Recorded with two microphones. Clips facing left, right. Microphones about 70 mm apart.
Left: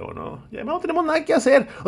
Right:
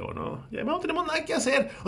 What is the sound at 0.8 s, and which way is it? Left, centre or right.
Speech, left.